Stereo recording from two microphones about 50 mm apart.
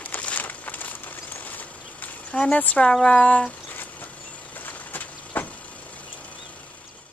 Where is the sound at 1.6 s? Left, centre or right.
Left.